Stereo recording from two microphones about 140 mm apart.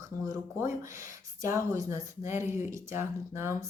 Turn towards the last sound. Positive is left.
turn(degrees=-20)  # may be behind; listen again after turning